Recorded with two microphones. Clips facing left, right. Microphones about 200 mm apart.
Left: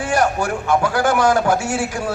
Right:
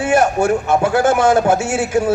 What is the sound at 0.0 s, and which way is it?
A man's voice, 25° right (ahead or behind).